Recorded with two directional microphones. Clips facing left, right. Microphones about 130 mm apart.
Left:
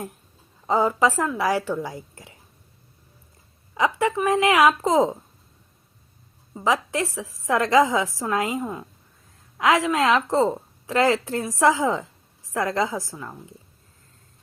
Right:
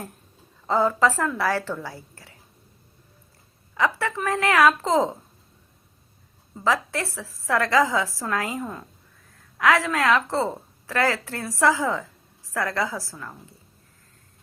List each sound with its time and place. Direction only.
0.7 s a woman's voice: 15° left (ahead or behind)
3.8 s a woman's voice: 15° left (ahead or behind)
6.5 s a woman's voice: 15° left (ahead or behind)